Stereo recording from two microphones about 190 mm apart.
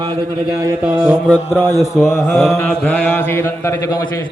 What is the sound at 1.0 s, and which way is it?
Mantra, 5° left (ahead or behind).